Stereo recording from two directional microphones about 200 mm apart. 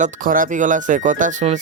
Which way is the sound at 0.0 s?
40° right (ahead or behind).